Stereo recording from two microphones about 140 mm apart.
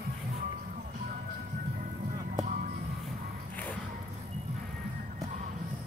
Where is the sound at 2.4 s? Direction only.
75° right (ahead or behind).